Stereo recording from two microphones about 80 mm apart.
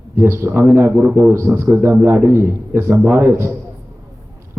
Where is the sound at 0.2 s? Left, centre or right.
Right.